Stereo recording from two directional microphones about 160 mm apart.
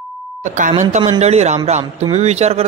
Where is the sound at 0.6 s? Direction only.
50° right (ahead or behind).